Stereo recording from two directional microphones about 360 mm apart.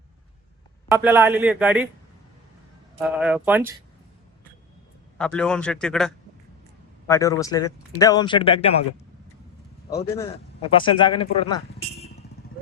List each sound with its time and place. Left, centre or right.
0.9 s a man's voice: centre
3.0 s a man's voice: centre
5.1 s a man's voice: centre
9.9 s speech: centre
11.9 s vehicle: centre